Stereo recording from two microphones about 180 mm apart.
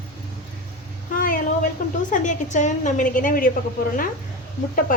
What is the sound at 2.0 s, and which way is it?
A woman's voice, 45° left (ahead or behind).